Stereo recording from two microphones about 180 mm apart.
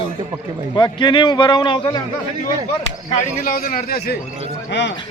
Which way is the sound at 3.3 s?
55° left (ahead or behind).